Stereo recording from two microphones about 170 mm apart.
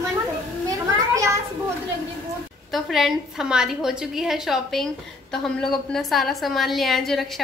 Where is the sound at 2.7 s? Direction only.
Centre (ahead or behind).